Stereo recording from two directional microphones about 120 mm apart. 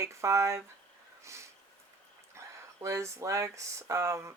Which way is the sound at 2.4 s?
25° right (ahead or behind).